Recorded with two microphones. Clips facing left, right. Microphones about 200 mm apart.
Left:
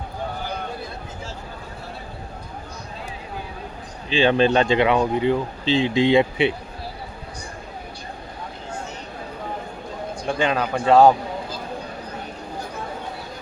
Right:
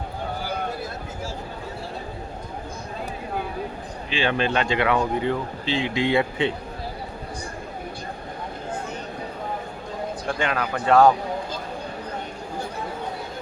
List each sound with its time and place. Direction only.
4.1 s speech: 25° left (ahead or behind)
10.2 s speech: 25° left (ahead or behind)